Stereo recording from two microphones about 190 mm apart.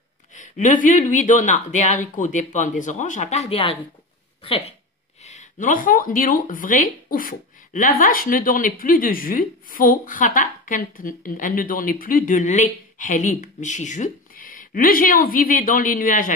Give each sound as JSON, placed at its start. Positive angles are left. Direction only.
{"t": 0.3, "sound": "speech", "side_deg": 40}